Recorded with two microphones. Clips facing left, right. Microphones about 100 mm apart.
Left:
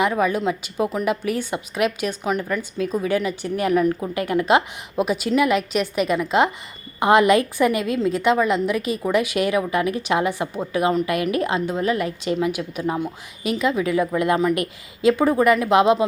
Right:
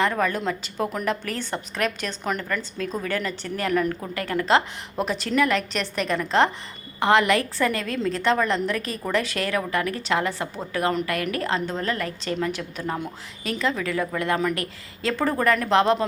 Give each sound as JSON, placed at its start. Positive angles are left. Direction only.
{"t": 0.0, "sound": "a woman's voice", "side_deg": 10}